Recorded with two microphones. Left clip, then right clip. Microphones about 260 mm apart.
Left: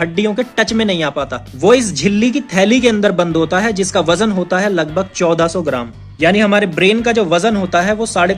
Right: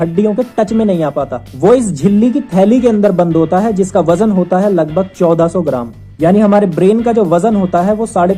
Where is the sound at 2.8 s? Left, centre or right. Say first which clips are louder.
Right 2 dB; left.